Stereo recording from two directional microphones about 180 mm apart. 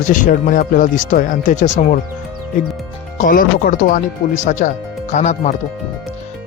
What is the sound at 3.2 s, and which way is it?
Speech, 50° left (ahead or behind).